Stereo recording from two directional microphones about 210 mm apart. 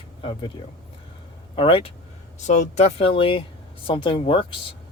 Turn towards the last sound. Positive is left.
turn(degrees=25)  # may be behind; listen again after turning